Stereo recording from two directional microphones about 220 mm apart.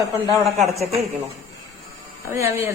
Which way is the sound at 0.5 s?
30° right (ahead or behind).